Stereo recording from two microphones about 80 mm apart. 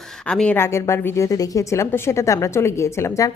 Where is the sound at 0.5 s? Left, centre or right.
Left.